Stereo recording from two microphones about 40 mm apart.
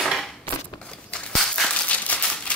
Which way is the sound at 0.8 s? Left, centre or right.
Left.